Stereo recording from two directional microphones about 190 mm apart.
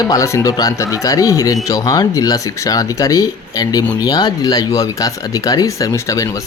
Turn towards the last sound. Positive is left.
turn(degrees=15)  # may be behind; listen again after turning